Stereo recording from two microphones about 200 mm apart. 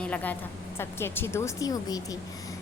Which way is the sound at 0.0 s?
10° left (ahead or behind).